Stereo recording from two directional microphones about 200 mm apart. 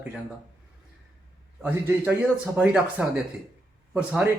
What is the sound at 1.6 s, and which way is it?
Speech, 5° right (ahead or behind).